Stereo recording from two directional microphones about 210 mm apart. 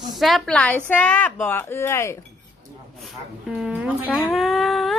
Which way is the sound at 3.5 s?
5° right (ahead or behind).